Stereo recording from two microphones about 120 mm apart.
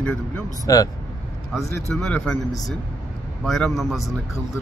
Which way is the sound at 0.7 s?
30° left (ahead or behind).